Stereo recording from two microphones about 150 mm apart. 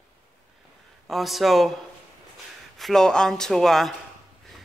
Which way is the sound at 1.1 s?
Centre (ahead or behind).